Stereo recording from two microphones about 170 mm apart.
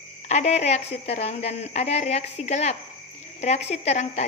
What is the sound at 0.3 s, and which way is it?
A woman's voice, 40° left (ahead or behind).